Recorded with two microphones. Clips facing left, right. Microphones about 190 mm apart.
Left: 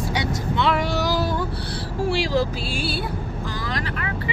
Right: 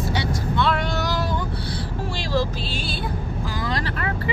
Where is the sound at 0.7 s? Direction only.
5° left (ahead or behind).